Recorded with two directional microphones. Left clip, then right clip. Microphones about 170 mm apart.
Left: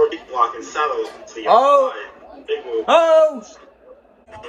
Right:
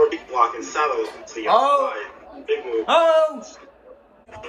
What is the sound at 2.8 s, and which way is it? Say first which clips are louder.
Speech: left 4 dB; 50° left (ahead or behind).